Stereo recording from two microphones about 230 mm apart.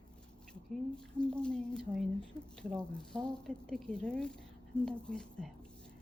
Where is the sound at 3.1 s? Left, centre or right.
Centre.